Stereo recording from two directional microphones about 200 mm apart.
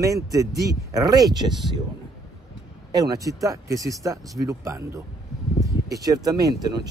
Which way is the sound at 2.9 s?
20° right (ahead or behind).